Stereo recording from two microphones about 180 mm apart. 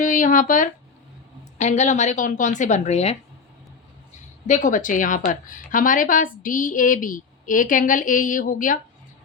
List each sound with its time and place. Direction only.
0.0 s a woman's voice: 45° left (ahead or behind)
4.4 s a woman's voice: 45° left (ahead or behind)